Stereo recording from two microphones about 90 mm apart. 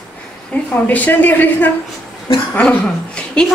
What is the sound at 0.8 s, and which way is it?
A woman's voice, 20° left (ahead or behind).